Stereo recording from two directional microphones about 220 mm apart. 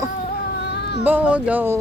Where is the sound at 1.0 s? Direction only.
10° right (ahead or behind).